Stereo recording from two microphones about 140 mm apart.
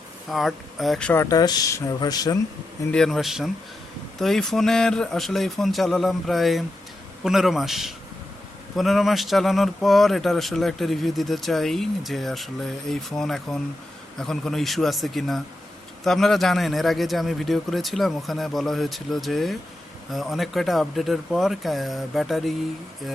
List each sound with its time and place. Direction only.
0.3 s a man's voice: centre (ahead or behind)
1.2 s speech: 25° left (ahead or behind)
2.9 s a man's voice: 5° left (ahead or behind)